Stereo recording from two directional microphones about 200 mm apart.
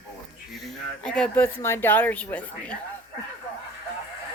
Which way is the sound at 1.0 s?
5° left (ahead or behind).